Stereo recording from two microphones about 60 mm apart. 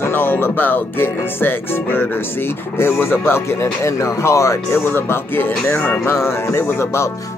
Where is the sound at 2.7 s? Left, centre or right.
Left.